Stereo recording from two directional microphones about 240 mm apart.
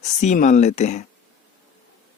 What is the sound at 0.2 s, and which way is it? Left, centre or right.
Speech, left.